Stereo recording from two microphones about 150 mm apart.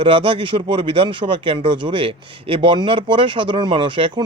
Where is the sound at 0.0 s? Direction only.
35° right (ahead or behind).